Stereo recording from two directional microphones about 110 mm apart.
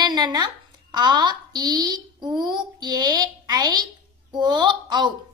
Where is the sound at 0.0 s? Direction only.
40° right (ahead or behind).